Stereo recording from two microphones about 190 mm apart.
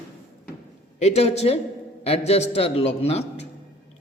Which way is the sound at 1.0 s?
35° left (ahead or behind).